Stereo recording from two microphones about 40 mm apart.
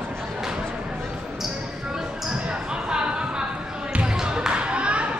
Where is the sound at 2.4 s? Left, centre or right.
Right.